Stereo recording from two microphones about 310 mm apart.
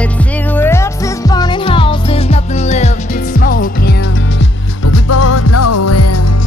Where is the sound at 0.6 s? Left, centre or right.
Centre; by 3.9 s left.